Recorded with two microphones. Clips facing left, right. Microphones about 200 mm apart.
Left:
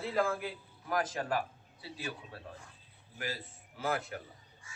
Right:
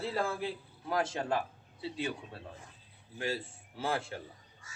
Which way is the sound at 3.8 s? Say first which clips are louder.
Even; 30° right (ahead or behind).